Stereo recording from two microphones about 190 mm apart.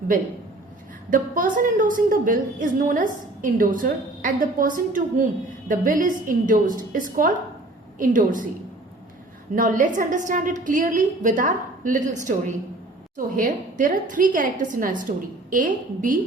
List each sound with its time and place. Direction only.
0.1 s a woman's voice: 45° right (ahead or behind)
9.6 s a woman's voice: 45° right (ahead or behind)